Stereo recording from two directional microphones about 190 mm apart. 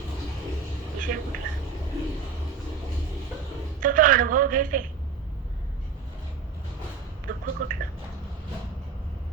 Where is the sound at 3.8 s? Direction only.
45° right (ahead or behind).